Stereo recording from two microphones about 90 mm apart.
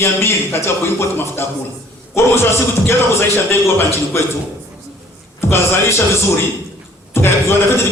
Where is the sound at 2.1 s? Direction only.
30° left (ahead or behind).